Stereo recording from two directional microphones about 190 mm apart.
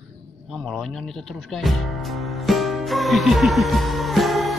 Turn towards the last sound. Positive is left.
turn(degrees=0)  # may be behind; listen again after turning